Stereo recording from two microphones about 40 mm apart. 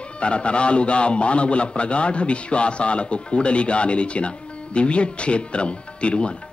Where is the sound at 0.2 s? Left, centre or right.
Left.